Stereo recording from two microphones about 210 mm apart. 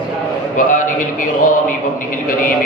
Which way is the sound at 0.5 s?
40° left (ahead or behind).